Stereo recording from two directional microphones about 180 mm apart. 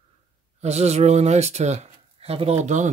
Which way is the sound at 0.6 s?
35° right (ahead or behind).